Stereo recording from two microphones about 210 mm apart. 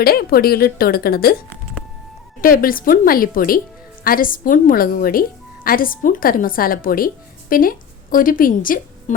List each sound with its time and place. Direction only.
0.0 s a woman's voice: 45° left (ahead or behind)
2.4 s a woman's voice: 45° left (ahead or behind)